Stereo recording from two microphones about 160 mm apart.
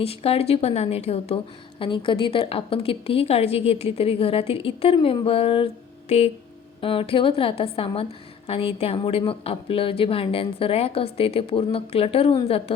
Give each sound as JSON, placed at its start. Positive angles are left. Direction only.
{"t": 0.0, "sound": "a woman's voice", "side_deg": 40}